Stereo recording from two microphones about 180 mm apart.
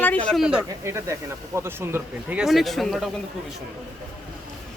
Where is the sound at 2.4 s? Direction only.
Centre (ahead or behind).